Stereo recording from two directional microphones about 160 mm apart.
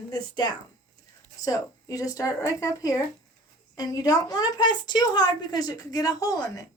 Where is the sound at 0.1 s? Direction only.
25° left (ahead or behind).